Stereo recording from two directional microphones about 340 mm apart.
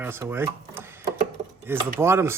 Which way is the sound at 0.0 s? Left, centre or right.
Centre.